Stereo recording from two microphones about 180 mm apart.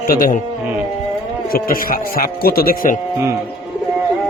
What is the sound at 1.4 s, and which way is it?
Speech, 55° left (ahead or behind).